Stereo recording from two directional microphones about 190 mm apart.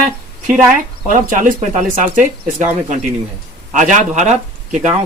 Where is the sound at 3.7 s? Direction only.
40° right (ahead or behind).